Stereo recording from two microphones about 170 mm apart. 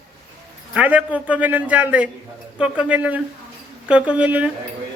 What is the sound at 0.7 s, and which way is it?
A man's voice, 10° right (ahead or behind).